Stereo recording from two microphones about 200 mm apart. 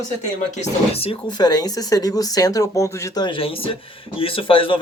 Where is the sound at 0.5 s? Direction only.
30° left (ahead or behind).